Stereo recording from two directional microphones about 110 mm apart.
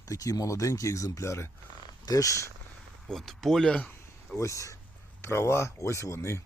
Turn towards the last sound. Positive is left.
turn(degrees=25)  # may be behind; listen again after turning